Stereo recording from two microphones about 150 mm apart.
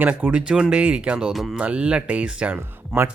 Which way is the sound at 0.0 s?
10° right (ahead or behind).